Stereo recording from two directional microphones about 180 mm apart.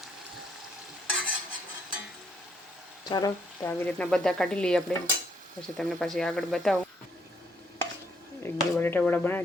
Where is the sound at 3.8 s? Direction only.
5° left (ahead or behind).